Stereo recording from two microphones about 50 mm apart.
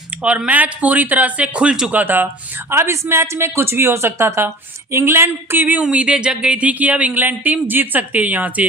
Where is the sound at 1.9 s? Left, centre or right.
Right.